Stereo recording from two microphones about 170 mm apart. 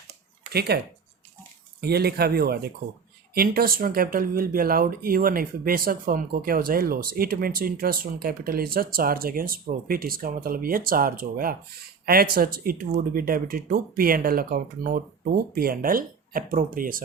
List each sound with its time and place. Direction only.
0.7 s speech: 65° right (ahead or behind)